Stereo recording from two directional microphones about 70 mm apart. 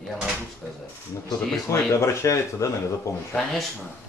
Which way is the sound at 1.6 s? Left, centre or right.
Left.